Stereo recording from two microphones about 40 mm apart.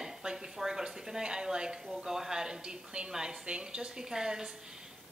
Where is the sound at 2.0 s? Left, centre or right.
Centre.